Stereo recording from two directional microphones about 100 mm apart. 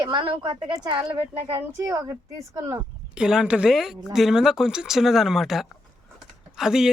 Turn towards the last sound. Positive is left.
turn(degrees=-5)  # may be behind; listen again after turning